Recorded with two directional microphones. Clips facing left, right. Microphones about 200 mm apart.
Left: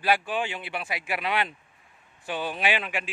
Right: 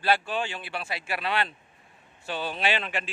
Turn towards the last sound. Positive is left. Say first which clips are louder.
# left 1 dB
turn(degrees=10)  # may be behind; listen again after turning